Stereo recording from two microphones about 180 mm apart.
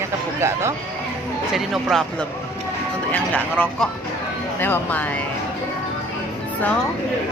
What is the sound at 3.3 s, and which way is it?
Speech, 10° left (ahead or behind).